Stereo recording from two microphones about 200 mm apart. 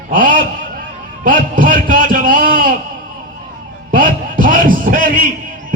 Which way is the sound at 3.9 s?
45° right (ahead or behind).